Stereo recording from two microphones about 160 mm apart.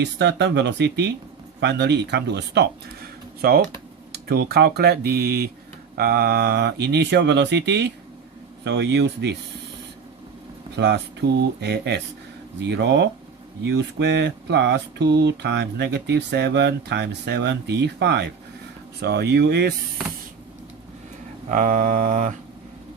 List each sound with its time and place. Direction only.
0.0 s speech: 90° right
4.1 s speech: 90° right
10.8 s speech: 90° right
21.5 s mantra: 55° right (ahead or behind)